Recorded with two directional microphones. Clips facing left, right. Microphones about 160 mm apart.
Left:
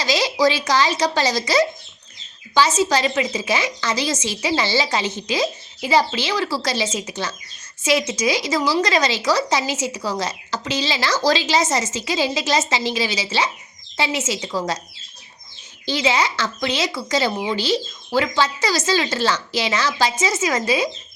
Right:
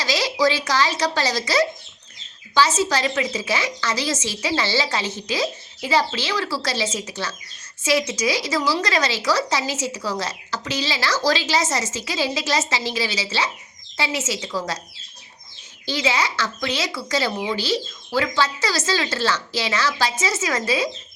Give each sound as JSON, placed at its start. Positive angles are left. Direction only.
{"t": 0.0, "sound": "a woman's voice", "side_deg": 20}
{"t": 15.9, "sound": "a woman's voice", "side_deg": 20}